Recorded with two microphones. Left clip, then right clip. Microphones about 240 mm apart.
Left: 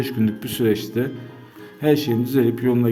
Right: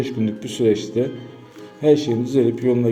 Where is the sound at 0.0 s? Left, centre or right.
Left.